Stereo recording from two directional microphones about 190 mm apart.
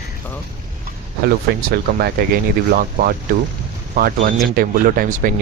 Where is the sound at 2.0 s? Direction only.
55° right (ahead or behind).